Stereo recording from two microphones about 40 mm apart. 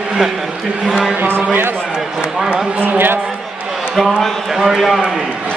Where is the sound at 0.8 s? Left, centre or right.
Centre.